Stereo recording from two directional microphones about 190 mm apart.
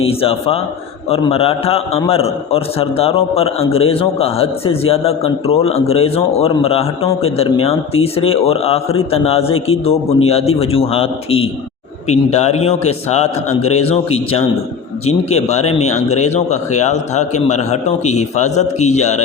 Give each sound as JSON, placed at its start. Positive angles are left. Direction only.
{"t": 0.0, "sound": "a man's voice", "side_deg": 30}